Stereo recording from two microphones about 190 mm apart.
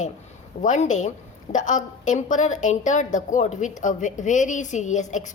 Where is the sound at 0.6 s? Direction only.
40° left (ahead or behind).